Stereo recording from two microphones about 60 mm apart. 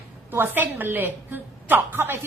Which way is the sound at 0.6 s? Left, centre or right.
Right.